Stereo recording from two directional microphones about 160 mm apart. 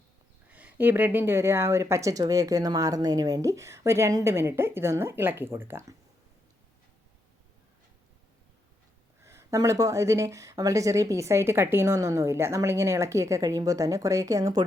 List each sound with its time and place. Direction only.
0.4 s speech: 10° right (ahead or behind)
9.2 s a woman's voice: 20° right (ahead or behind)